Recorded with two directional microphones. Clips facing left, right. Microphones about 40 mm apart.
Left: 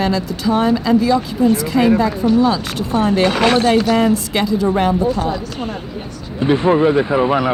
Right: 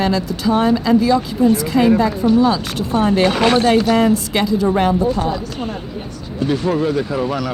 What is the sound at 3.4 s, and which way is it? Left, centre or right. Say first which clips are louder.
Speech: even; left.